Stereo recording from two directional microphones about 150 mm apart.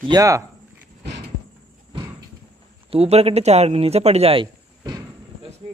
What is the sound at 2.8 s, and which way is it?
Speech, 45° right (ahead or behind).